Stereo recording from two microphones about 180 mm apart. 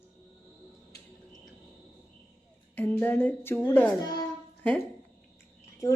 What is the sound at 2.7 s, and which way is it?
Speech, 10° left (ahead or behind).